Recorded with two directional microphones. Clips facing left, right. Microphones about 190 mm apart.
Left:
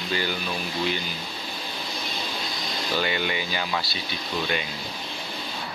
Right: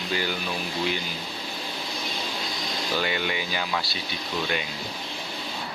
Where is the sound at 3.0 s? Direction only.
Centre (ahead or behind).